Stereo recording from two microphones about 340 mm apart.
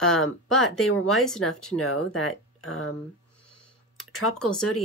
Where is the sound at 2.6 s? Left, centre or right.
Left.